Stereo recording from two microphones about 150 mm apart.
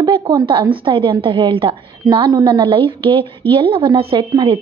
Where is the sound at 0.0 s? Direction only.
30° right (ahead or behind).